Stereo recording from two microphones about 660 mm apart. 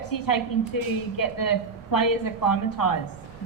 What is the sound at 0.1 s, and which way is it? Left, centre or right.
A woman's voice, left.